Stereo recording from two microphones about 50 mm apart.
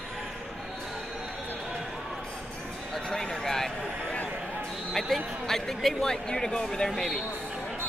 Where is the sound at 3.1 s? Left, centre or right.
Centre.